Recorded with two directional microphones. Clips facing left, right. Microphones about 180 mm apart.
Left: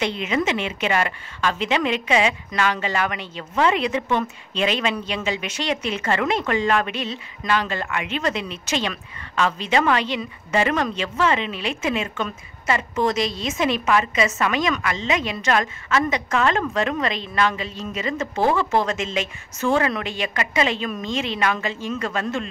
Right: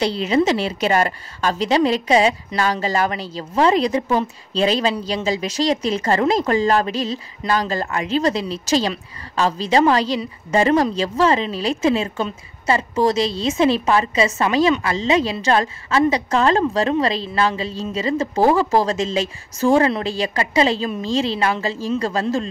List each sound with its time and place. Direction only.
0.0 s a woman's voice: 35° right (ahead or behind)